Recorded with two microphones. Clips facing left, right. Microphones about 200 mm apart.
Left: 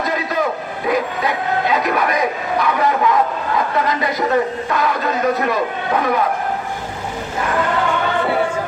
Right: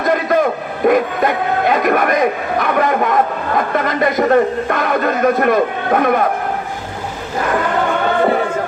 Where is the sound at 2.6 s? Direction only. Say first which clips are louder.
Right 1 dB; 55° right (ahead or behind).